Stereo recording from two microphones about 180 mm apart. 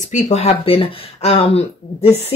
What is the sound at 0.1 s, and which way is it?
Speech, 40° left (ahead or behind).